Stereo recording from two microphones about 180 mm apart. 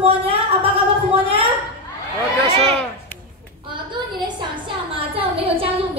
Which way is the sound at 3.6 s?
25° right (ahead or behind).